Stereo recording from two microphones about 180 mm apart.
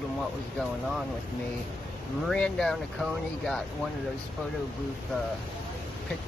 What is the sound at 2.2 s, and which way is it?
Speech, 5° left (ahead or behind).